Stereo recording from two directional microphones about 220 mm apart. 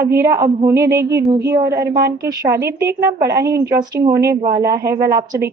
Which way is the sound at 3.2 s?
15° right (ahead or behind).